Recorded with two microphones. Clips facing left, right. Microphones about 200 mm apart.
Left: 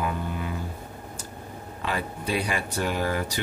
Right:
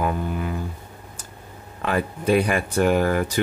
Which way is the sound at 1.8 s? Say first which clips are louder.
Right 6 dB; 55° right (ahead or behind).